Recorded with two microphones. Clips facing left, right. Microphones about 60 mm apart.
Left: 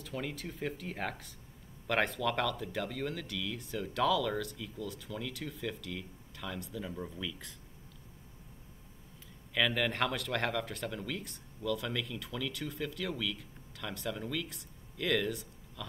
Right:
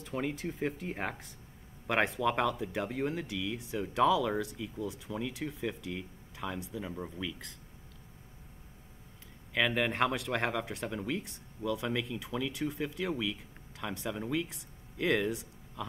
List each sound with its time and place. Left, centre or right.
0.0 s speech: right
9.5 s speech: centre